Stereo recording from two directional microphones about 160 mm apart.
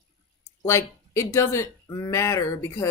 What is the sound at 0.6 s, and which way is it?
Speech, 15° left (ahead or behind).